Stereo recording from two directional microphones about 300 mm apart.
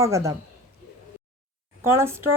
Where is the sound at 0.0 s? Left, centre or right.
Centre.